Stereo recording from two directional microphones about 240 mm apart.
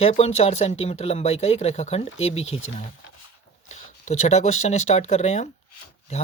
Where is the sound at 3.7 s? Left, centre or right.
Left.